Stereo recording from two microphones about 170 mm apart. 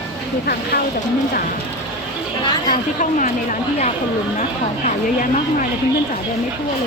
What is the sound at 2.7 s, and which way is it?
Speech, 50° left (ahead or behind).